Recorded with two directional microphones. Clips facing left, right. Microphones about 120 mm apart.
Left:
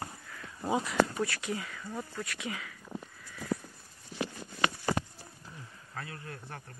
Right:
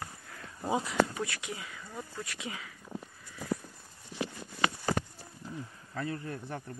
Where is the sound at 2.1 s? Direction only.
25° right (ahead or behind).